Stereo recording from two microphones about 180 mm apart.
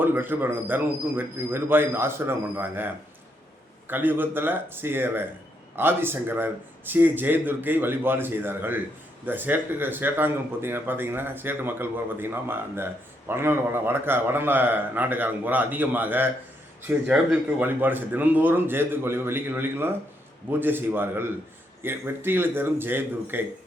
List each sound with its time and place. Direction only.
0.0 s speech: 10° right (ahead or behind)